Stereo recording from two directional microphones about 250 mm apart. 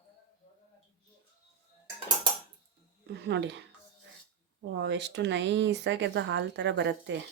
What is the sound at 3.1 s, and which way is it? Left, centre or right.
Speech, right.